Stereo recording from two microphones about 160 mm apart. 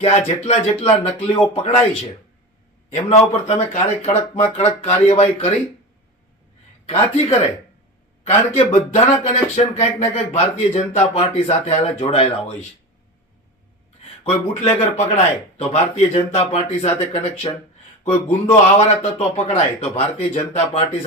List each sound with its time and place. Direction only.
0.0 s speech: 40° left (ahead or behind)
2.9 s speech: 45° left (ahead or behind)
6.8 s speech: 40° left (ahead or behind)
14.6 s speech: 40° left (ahead or behind)
17.5 s speech: 35° left (ahead or behind)